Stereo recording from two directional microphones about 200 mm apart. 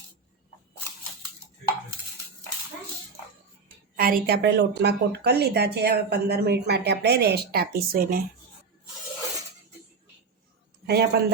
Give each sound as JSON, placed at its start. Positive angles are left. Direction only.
{"t": 3.9, "sound": "a woman's voice", "side_deg": -45}
{"t": 10.8, "sound": "a man's voice", "side_deg": -55}